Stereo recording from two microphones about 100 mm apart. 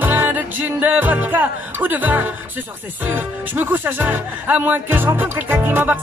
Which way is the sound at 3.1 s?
20° right (ahead or behind).